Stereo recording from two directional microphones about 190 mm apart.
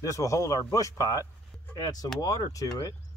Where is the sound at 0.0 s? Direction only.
15° left (ahead or behind).